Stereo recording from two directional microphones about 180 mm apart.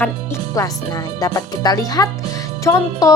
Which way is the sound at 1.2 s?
20° left (ahead or behind).